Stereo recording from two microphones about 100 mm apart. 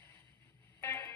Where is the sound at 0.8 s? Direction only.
25° left (ahead or behind).